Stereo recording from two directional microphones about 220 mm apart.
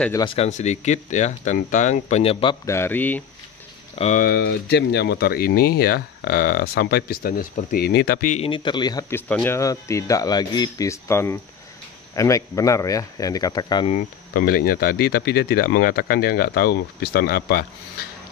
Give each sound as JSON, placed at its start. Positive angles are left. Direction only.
{"t": 0.2, "sound": "speech", "side_deg": 25}
{"t": 2.6, "sound": "speech", "side_deg": 10}
{"t": 3.9, "sound": "speech", "side_deg": 30}
{"t": 8.5, "sound": "speech", "side_deg": 20}
{"t": 13.9, "sound": "speech", "side_deg": 40}